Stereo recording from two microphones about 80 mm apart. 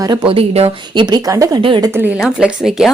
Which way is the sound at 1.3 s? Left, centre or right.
Right.